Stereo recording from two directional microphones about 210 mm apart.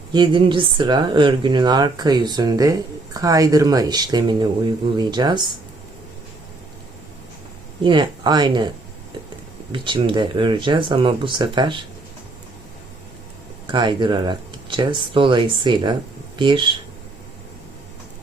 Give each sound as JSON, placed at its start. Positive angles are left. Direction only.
{"t": 0.1, "sound": "speech", "side_deg": -20}
{"t": 7.9, "sound": "speech", "side_deg": -20}
{"t": 9.7, "sound": "speech", "side_deg": -25}
{"t": 13.7, "sound": "speech", "side_deg": -20}